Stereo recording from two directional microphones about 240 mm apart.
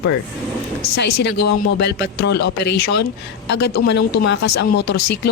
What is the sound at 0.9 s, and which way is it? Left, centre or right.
Speech, left.